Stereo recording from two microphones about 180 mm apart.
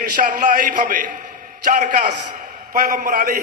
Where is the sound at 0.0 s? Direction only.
50° right (ahead or behind).